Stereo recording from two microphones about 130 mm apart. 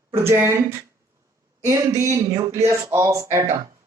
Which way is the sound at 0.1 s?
20° right (ahead or behind).